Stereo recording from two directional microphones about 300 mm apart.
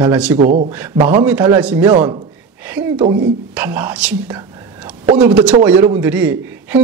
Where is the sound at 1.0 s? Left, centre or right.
Centre.